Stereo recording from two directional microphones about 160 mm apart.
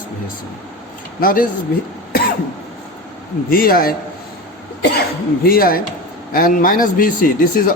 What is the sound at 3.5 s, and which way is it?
Speech, 65° left (ahead or behind).